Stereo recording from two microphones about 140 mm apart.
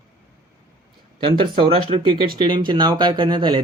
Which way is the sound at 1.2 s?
35° right (ahead or behind).